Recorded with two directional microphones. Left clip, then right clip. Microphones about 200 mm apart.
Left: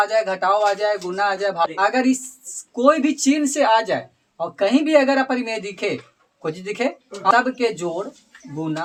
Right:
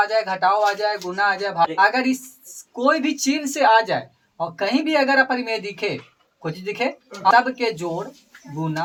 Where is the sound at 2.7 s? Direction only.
35° left (ahead or behind).